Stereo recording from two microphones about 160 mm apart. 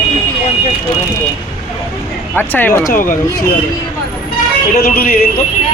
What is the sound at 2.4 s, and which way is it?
Speech, 10° left (ahead or behind).